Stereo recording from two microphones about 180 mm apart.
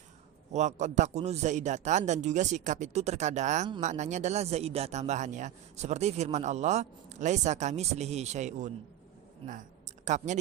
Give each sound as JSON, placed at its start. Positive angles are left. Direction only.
{"t": 0.5, "sound": "speech", "side_deg": -40}
{"t": 10.3, "sound": "speech", "side_deg": -40}